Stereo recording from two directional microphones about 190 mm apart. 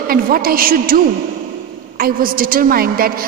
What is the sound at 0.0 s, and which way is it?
A woman's voice, 50° right (ahead or behind).